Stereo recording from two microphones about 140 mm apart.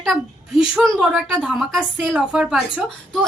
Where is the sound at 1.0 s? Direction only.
5° right (ahead or behind).